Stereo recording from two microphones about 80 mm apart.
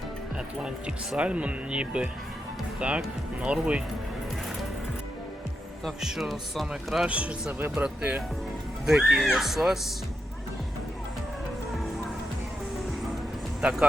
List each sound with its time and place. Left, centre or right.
1.1 s speech: centre
6.0 s a man's voice: centre
7.1 s speech: centre
8.9 s a man's voice: centre
13.6 s speech: centre